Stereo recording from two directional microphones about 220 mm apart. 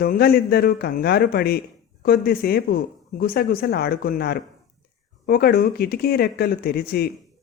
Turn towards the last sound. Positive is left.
turn(degrees=45)  # may be behind; listen again after turning